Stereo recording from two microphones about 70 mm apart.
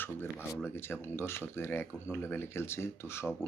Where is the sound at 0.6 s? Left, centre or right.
Left.